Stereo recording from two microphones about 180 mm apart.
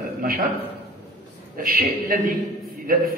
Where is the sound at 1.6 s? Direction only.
55° right (ahead or behind).